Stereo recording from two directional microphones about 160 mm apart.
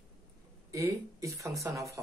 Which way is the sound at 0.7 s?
20° right (ahead or behind).